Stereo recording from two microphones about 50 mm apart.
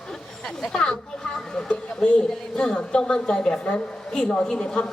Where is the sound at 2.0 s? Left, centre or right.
Left.